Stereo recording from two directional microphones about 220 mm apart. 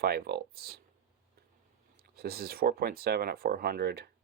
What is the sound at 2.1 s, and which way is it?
Speech, 45° right (ahead or behind).